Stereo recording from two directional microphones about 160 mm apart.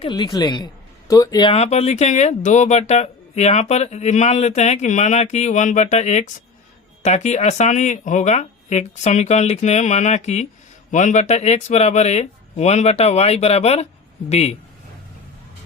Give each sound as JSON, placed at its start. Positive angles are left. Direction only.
{"t": 0.0, "sound": "speech", "side_deg": 30}
{"t": 1.5, "sound": "speech", "side_deg": 40}